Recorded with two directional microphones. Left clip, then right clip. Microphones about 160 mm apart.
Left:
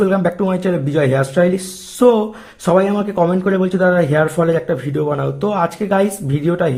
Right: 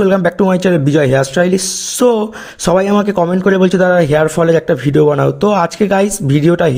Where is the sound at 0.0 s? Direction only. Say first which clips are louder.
Right 4 dB; 40° right (ahead or behind).